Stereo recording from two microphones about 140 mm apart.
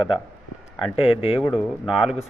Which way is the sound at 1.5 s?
5° right (ahead or behind).